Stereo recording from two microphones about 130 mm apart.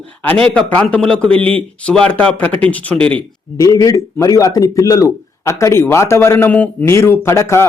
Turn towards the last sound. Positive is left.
turn(degrees=20)  # may be behind; listen again after turning